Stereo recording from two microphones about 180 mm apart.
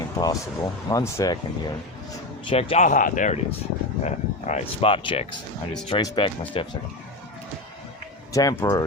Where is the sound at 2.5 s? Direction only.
35° left (ahead or behind).